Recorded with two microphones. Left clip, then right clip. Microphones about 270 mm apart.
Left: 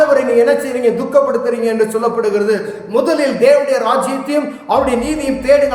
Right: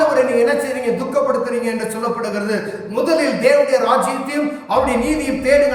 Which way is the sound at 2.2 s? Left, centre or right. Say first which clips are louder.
Left 6 dB; centre.